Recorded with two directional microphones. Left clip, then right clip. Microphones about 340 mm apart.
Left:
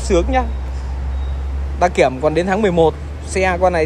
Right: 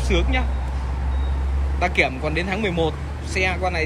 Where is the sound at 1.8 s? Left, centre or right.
Centre.